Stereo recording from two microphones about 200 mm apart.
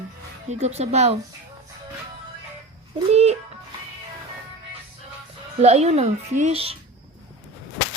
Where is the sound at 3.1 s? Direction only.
30° right (ahead or behind).